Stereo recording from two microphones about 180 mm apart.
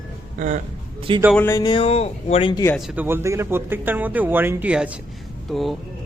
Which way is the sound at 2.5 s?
15° left (ahead or behind).